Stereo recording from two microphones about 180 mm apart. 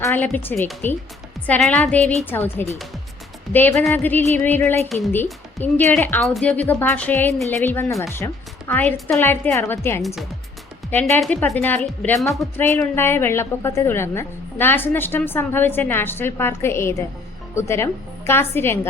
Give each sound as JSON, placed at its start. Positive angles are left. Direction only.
{"t": 0.0, "sound": "a woman's voice", "side_deg": 10}
{"t": 11.2, "sound": "a woman's voice", "side_deg": 5}